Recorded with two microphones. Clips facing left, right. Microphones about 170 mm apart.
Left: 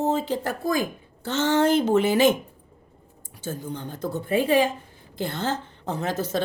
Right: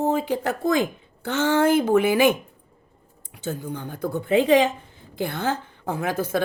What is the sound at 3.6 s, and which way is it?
Speech, 50° right (ahead or behind).